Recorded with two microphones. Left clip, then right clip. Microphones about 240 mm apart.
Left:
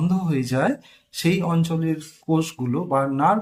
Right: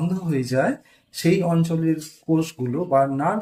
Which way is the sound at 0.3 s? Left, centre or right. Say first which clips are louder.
Right 2 dB; centre.